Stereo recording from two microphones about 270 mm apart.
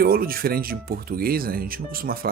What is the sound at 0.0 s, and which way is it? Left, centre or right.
Speech, right.